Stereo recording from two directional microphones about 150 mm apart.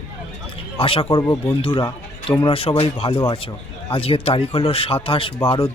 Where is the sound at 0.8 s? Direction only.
35° left (ahead or behind).